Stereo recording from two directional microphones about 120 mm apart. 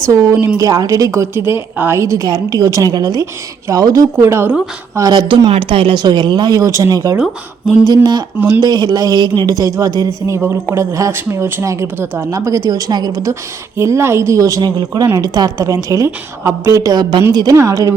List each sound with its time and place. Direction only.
0.0 s speech: 25° right (ahead or behind)
4.9 s speech: 35° right (ahead or behind)
5.5 s speech: 50° right (ahead or behind); by 17.9 s 25° right (ahead or behind)